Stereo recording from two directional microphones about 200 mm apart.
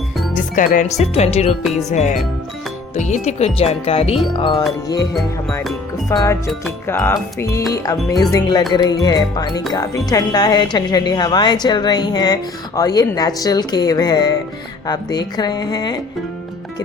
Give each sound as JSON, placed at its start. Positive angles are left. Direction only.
{"t": 0.3, "sound": "music", "side_deg": 40}
{"t": 0.9, "sound": "speech", "side_deg": 30}
{"t": 6.1, "sound": "speech", "side_deg": 15}